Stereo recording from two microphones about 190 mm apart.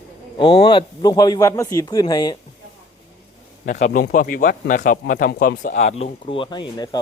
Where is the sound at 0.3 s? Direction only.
20° left (ahead or behind).